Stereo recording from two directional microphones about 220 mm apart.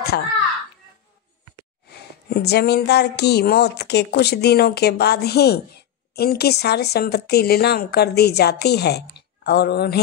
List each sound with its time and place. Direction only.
0.1 s speech: 45° left (ahead or behind)
1.9 s speech: 45° left (ahead or behind)